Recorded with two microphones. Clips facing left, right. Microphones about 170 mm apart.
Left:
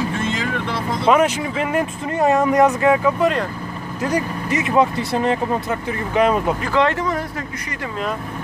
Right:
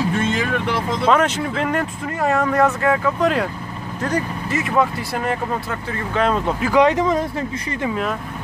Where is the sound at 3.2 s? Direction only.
Centre (ahead or behind).